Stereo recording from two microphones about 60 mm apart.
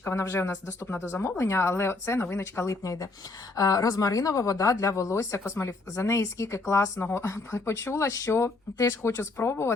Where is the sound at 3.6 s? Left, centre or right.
Left.